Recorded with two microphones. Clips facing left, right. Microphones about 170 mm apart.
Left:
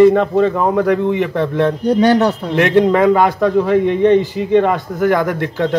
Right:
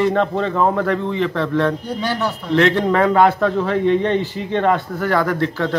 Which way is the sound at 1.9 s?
60° left (ahead or behind).